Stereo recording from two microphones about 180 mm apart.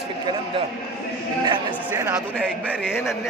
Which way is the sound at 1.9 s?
15° right (ahead or behind).